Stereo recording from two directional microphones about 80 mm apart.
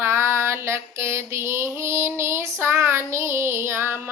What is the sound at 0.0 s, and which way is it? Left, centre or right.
Mantra, right.